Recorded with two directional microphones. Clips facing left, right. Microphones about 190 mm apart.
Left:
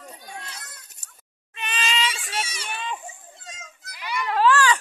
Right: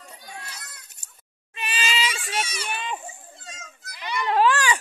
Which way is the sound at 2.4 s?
25° left (ahead or behind).